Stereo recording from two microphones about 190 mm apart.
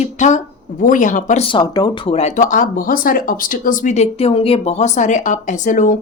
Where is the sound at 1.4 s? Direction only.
20° left (ahead or behind).